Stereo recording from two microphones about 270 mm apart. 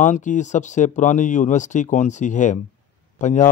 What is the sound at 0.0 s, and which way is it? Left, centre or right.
A man's voice, left.